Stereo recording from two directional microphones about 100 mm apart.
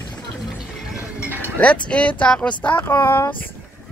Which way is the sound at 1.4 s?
15° left (ahead or behind).